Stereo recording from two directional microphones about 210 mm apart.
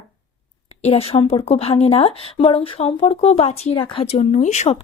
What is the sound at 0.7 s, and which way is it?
A woman's voice, 30° left (ahead or behind).